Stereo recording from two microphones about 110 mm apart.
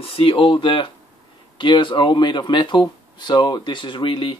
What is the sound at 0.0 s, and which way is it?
Speech, 55° left (ahead or behind).